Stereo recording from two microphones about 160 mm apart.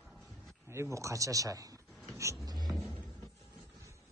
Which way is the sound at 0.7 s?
15° right (ahead or behind).